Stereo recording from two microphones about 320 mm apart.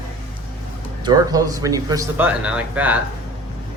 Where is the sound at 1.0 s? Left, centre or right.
Centre.